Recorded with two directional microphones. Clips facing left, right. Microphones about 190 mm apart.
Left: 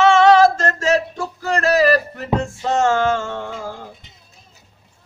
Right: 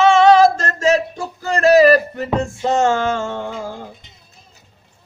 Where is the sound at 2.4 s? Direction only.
15° right (ahead or behind).